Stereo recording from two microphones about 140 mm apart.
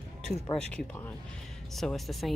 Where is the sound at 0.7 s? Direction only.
10° left (ahead or behind).